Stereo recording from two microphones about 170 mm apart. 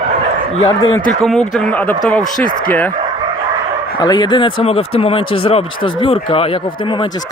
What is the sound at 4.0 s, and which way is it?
Speech, 25° left (ahead or behind).